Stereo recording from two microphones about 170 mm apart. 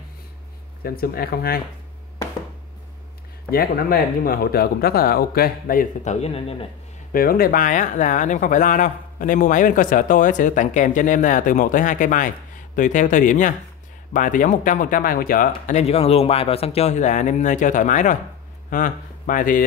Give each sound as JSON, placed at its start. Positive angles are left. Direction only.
{"t": 0.8, "sound": "speech", "side_deg": 60}
{"t": 3.4, "sound": "speech", "side_deg": 60}
{"t": 6.2, "sound": "a man's voice", "side_deg": 35}
{"t": 7.1, "sound": "speech", "side_deg": 60}